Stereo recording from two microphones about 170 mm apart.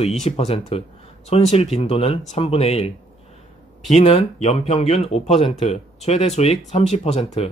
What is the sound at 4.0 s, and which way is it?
Speech, 35° left (ahead or behind).